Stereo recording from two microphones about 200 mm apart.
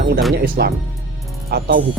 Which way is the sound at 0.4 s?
45° right (ahead or behind).